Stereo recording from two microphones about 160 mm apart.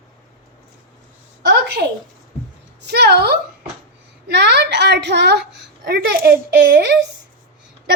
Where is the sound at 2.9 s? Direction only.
90° right.